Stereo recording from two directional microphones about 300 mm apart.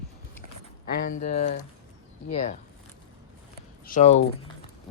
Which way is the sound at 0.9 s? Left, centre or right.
Left.